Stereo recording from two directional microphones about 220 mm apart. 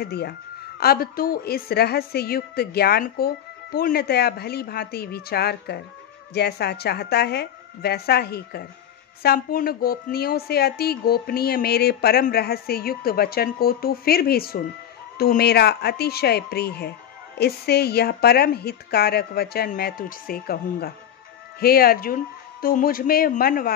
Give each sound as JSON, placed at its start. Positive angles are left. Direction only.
{"t": 0.0, "sound": "speech", "side_deg": 45}
{"t": 21.5, "sound": "speech", "side_deg": 45}